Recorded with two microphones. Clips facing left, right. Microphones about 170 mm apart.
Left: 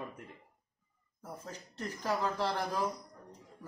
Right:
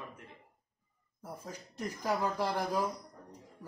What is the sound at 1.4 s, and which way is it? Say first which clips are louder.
A man's voice: right 2 dB; 10° right (ahead or behind).